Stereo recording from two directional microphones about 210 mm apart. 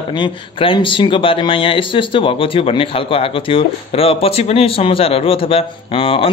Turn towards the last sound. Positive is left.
turn(degrees=25)  # may be behind; listen again after turning